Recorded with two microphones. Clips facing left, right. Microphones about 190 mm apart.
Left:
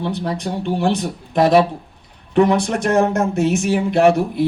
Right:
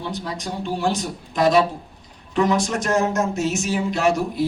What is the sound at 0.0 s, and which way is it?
Speech, 60° left (ahead or behind).